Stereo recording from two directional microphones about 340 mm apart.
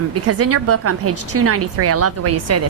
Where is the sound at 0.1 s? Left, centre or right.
Right.